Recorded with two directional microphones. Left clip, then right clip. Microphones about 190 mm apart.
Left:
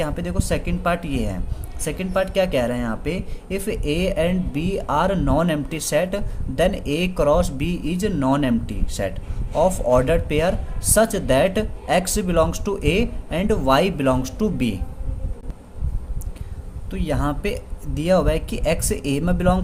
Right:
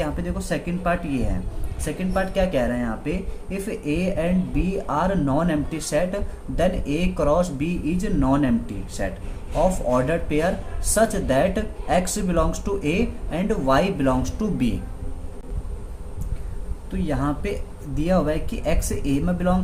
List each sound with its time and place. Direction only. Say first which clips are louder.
0.0 s speech: left 2 dB; 50° left (ahead or behind)
16.9 s speech: left 1 dB; 50° left (ahead or behind)